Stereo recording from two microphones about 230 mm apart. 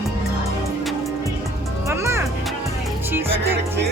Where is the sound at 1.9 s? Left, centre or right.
Centre.